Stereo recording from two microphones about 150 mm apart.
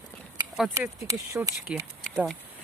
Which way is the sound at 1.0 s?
20° right (ahead or behind).